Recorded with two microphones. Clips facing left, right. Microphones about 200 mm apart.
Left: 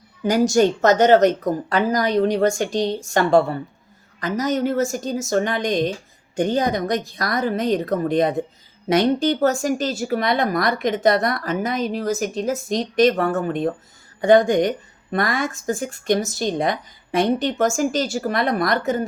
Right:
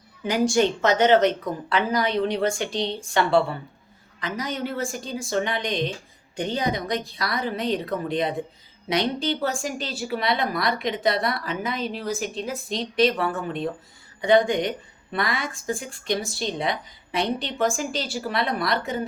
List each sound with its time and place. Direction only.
0.2 s speech: 40° left (ahead or behind)